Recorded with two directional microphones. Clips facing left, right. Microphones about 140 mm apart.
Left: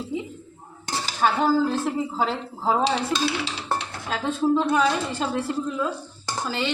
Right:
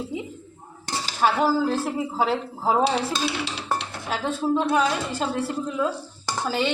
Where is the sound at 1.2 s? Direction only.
5° right (ahead or behind).